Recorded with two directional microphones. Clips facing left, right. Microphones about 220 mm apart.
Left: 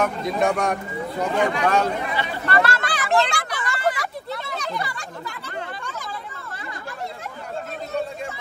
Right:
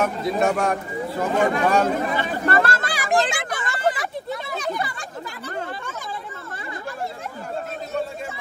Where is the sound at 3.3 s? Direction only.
20° right (ahead or behind).